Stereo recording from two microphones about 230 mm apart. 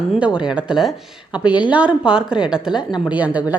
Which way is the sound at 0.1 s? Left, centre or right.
Centre.